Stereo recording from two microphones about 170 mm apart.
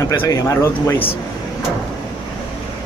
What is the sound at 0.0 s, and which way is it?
Speech, 15° left (ahead or behind).